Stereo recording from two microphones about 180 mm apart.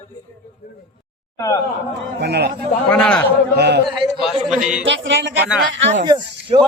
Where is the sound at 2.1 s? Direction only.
65° right (ahead or behind).